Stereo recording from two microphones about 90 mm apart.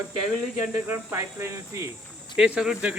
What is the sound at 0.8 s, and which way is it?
Cricket, 25° right (ahead or behind).